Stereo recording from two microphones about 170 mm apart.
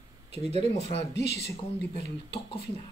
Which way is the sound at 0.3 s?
35° right (ahead or behind).